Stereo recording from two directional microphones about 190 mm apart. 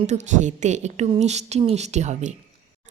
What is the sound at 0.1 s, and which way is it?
Speech, 40° right (ahead or behind).